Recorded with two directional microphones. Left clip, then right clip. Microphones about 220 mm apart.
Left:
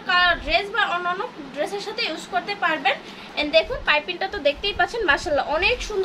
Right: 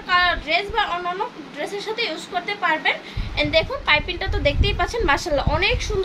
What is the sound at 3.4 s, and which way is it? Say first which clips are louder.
A woman's voice: even; 15° right (ahead or behind).